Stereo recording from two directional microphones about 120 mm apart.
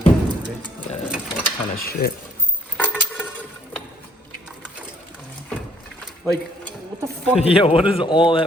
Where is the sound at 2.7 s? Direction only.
15° left (ahead or behind).